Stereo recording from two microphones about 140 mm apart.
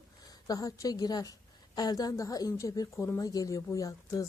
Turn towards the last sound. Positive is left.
turn(degrees=25)  # may be behind; listen again after turning